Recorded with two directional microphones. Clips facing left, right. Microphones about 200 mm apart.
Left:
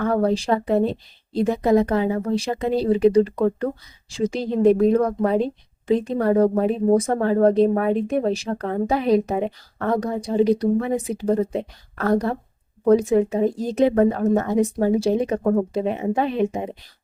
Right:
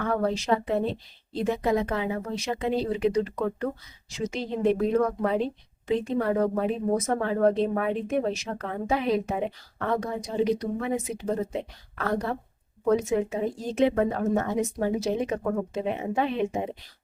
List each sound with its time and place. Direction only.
0.0 s speech: 40° left (ahead or behind)